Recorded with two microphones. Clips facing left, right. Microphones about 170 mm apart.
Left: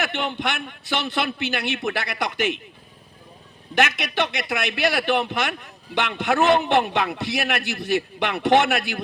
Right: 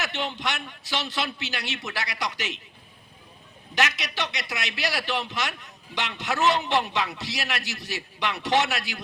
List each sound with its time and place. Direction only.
0.0 s a man's voice: 55° left (ahead or behind)
3.8 s a man's voice: 55° left (ahead or behind)